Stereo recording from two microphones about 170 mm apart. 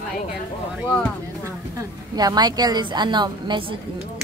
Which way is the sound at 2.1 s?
25° right (ahead or behind).